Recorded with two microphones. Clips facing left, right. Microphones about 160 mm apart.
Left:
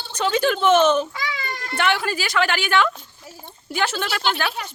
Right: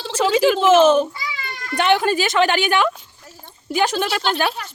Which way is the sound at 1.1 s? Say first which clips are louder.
Left 2 dB; 90° left.